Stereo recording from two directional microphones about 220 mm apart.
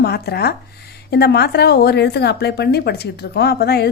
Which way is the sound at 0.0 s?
45° left (ahead or behind).